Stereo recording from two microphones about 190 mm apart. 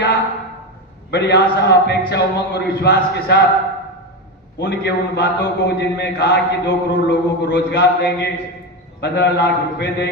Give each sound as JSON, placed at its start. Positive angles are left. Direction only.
{"t": 1.1, "sound": "a man's voice", "side_deg": 65}
{"t": 4.6, "sound": "a man's voice", "side_deg": 60}